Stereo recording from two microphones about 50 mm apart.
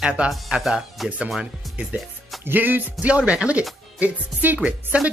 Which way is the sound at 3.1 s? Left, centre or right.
Right.